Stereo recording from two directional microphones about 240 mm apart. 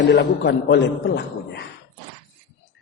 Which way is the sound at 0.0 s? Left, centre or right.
Left.